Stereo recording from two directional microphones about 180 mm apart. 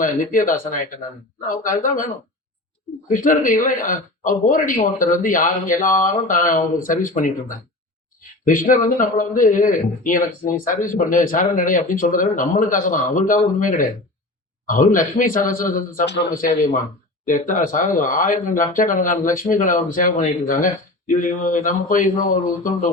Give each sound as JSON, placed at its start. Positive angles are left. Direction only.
{"t": 0.0, "sound": "speech", "side_deg": 50}
{"t": 3.1, "sound": "speech", "side_deg": 50}
{"t": 16.0, "sound": "speech", "side_deg": 75}
{"t": 17.2, "sound": "speech", "side_deg": 45}